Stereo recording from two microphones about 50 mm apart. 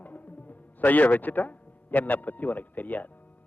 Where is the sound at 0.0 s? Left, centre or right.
Left.